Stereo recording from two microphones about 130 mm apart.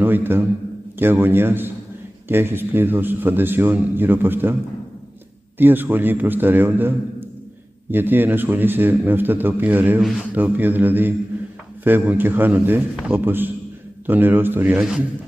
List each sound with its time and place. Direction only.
0.0 s a man's voice: 15° right (ahead or behind)
5.6 s a man's voice: 15° right (ahead or behind)
14.8 s a man's voice: 5° right (ahead or behind)